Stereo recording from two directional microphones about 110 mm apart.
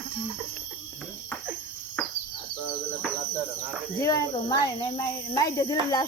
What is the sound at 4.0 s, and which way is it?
Speech, 35° left (ahead or behind).